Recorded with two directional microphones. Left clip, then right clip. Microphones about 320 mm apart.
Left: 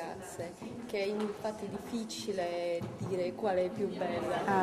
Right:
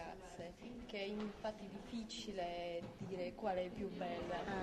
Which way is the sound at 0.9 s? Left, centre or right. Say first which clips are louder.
Left 12 dB; right.